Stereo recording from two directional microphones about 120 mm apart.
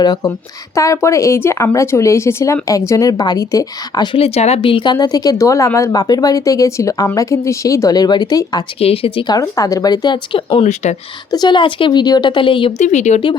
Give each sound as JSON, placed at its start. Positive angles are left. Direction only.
{"t": 0.0, "sound": "speech", "side_deg": 30}
{"t": 4.2, "sound": "speech", "side_deg": 60}
{"t": 4.9, "sound": "speech", "side_deg": 30}
{"t": 8.8, "sound": "speech", "side_deg": 55}
{"t": 9.3, "sound": "speech", "side_deg": 30}
{"t": 10.6, "sound": "speech", "side_deg": 75}
{"t": 11.3, "sound": "speech", "side_deg": 35}
{"t": 12.8, "sound": "speech", "side_deg": 80}